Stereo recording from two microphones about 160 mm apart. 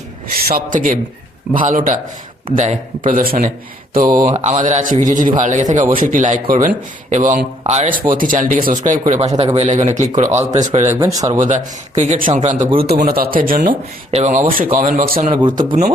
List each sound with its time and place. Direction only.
0.3 s speech: 65° right (ahead or behind)
4.3 s speech: 45° right (ahead or behind)
10.9 s speech: 20° right (ahead or behind)
11.3 s speech: 50° right (ahead or behind)
12.8 s speech: 70° right (ahead or behind)
14.1 s speech: 45° right (ahead or behind)
14.5 s speech: 60° right (ahead or behind)
15.4 s speech: 30° right (ahead or behind)